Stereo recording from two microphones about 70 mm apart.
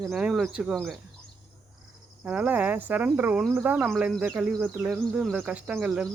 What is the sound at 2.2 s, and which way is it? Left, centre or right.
Speech, centre.